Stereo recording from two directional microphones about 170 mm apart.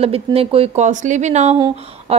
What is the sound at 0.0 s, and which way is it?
A woman's voice, 35° right (ahead or behind).